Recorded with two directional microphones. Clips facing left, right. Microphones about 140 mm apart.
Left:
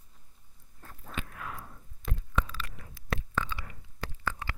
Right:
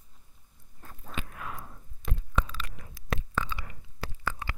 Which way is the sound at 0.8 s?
20° right (ahead or behind).